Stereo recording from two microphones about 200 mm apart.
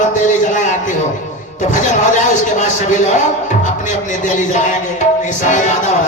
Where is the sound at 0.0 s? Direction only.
40° left (ahead or behind).